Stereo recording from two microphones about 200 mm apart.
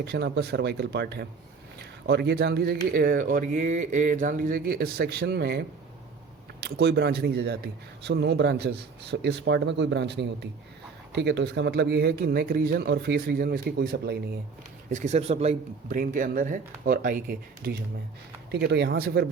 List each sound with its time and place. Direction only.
0.0 s speech: 55° right (ahead or behind)
14.8 s speech: 35° right (ahead or behind)
18.5 s speech: 55° right (ahead or behind)